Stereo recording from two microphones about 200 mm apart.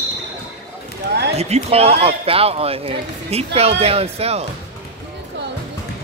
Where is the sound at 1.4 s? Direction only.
30° right (ahead or behind).